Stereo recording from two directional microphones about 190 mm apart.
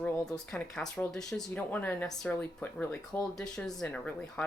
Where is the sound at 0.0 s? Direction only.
5° left (ahead or behind).